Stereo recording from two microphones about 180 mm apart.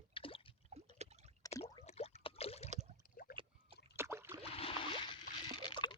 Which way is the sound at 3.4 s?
30° right (ahead or behind).